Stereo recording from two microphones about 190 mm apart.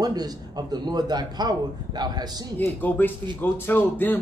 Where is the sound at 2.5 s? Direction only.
10° left (ahead or behind).